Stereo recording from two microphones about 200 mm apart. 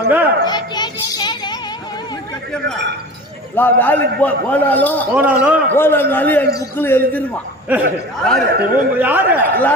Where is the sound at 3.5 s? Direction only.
10° left (ahead or behind).